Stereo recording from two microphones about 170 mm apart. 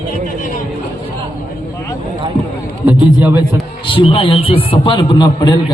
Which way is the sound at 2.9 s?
10° right (ahead or behind).